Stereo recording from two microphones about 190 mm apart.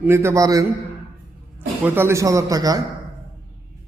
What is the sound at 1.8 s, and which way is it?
A man's voice, 10° right (ahead or behind).